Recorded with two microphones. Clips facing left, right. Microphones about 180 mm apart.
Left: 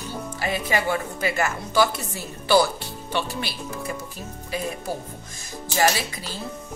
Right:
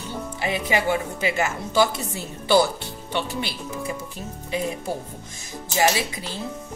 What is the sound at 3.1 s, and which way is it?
Speech, 20° right (ahead or behind).